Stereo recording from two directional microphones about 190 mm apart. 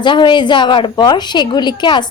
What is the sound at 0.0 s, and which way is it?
A woman's voice, 25° left (ahead or behind).